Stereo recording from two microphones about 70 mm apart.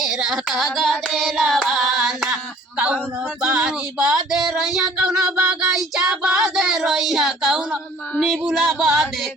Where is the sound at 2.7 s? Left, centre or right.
Centre.